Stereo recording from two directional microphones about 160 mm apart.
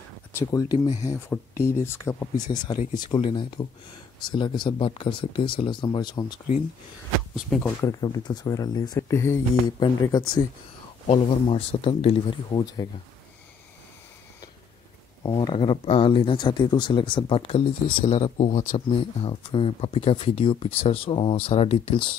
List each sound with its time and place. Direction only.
0.3 s speech: 15° left (ahead or behind)
2.5 s speech: 30° left (ahead or behind)
7.3 s speech: 5° left (ahead or behind)
7.8 s speech: 25° left (ahead or behind)
11.1 s speech: 40° left (ahead or behind)
15.2 s speech: 30° left (ahead or behind)